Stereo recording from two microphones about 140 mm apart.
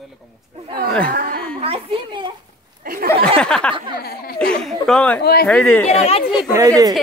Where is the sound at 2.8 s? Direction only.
90° right.